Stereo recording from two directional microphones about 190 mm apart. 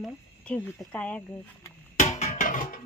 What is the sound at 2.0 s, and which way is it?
Music, 35° left (ahead or behind).